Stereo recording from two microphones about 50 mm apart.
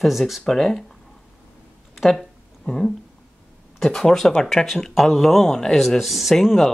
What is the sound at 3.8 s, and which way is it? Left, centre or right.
Speech, centre.